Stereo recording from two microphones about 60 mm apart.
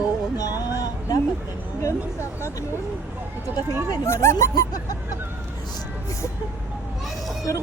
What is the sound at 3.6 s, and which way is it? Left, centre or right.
Speech, right.